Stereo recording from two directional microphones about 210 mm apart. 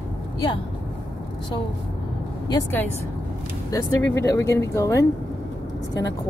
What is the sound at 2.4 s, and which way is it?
Speech, 20° left (ahead or behind).